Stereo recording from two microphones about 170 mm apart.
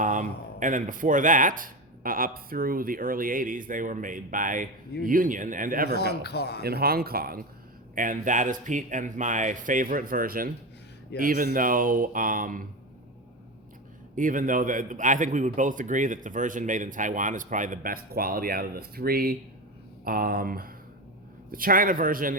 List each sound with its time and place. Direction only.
0.0 s a man's voice: 50° right (ahead or behind)
6.0 s speech: 75° left (ahead or behind)
6.6 s a man's voice: 65° right (ahead or behind)
14.2 s a man's voice: 50° right (ahead or behind)